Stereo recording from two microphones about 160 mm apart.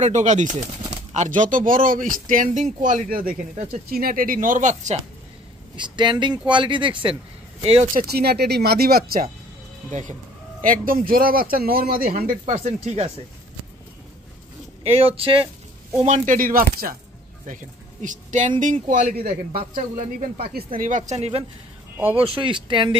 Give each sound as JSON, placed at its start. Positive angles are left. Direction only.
{"t": 0.0, "sound": "speech", "side_deg": -45}
{"t": 5.8, "sound": "speech", "side_deg": -30}
{"t": 8.1, "sound": "speech", "side_deg": -85}
{"t": 9.8, "sound": "speech", "side_deg": -50}
{"t": 12.5, "sound": "speech", "side_deg": -45}
{"t": 14.8, "sound": "speech", "side_deg": -35}
{"t": 16.0, "sound": "speech", "side_deg": -50}
{"t": 18.0, "sound": "speech", "side_deg": -50}
{"t": 20.4, "sound": "speech", "side_deg": -65}